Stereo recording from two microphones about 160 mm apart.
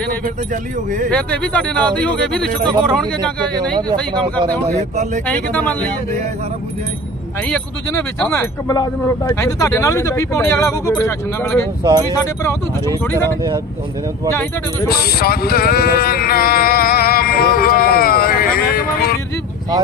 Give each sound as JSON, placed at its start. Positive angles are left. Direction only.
{"t": 0.5, "sound": "speech", "side_deg": -55}
{"t": 1.1, "sound": "speech", "side_deg": 5}
{"t": 4.7, "sound": "speech", "side_deg": -45}
{"t": 5.2, "sound": "speech", "side_deg": 10}
{"t": 7.4, "sound": "speech", "side_deg": 10}
{"t": 11.8, "sound": "speech", "side_deg": -25}
{"t": 12.2, "sound": "speech", "side_deg": 20}
{"t": 14.8, "sound": "a sound", "side_deg": 70}